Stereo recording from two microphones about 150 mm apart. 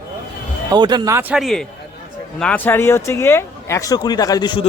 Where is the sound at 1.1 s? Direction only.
10° right (ahead or behind).